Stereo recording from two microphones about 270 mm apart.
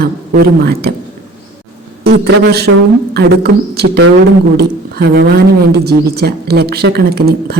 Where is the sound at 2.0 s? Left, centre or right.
Right.